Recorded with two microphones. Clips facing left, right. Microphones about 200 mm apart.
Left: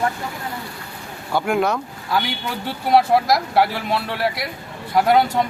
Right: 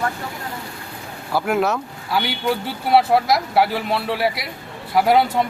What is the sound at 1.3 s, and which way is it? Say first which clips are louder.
Speech: even; 5° right (ahead or behind).